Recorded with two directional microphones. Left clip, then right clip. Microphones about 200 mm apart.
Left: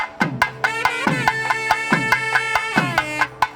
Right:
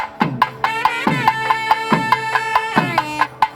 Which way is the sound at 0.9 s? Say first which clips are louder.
Right 3 dB; centre (ahead or behind).